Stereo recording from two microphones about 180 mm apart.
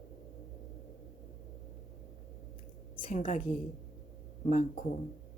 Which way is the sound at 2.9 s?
30° left (ahead or behind).